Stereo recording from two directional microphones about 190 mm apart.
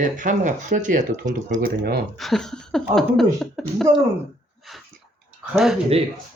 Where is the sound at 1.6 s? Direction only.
55° right (ahead or behind).